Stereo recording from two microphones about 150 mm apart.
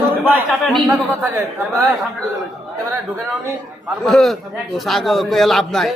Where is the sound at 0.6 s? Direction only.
Centre (ahead or behind).